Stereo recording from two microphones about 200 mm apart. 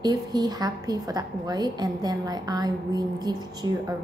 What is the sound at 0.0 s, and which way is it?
A woman's voice, 20° right (ahead or behind).